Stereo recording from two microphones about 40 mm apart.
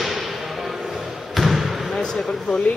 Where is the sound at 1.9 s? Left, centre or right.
Centre.